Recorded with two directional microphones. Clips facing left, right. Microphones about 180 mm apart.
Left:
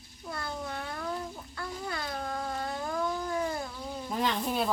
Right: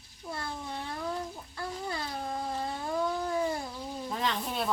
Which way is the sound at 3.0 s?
10° right (ahead or behind).